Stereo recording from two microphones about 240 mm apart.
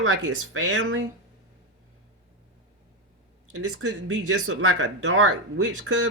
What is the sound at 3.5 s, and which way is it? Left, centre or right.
Speech, right.